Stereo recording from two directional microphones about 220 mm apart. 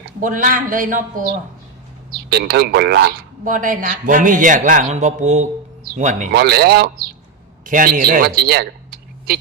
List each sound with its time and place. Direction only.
0.2 s speech: 35° right (ahead or behind)